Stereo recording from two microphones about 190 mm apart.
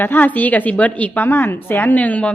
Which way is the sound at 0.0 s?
10° left (ahead or behind).